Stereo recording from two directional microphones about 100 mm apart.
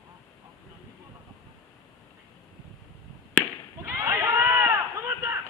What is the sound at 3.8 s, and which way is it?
Run, 25° right (ahead or behind).